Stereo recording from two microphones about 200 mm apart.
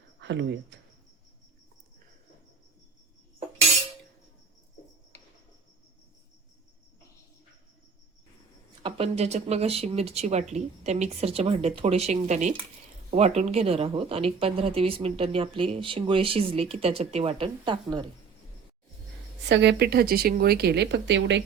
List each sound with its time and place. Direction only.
0.2 s speech: 65° right (ahead or behind)
8.8 s a woman's voice: 30° right (ahead or behind)
19.5 s speech: 60° right (ahead or behind)